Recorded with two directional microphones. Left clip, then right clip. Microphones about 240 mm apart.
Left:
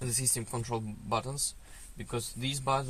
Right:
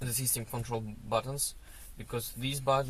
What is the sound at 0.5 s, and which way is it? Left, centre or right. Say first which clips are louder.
Speech: left 1 dB; left.